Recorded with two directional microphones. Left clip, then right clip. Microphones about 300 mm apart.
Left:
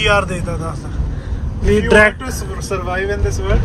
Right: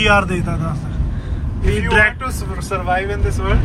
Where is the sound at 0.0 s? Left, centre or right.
Centre.